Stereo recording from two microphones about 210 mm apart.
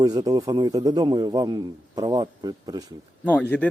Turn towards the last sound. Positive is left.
turn(degrees=10)  # may be behind; listen again after turning